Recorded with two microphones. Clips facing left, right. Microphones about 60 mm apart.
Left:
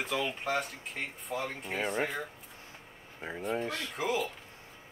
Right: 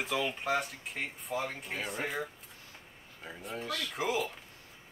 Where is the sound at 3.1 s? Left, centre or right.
Left.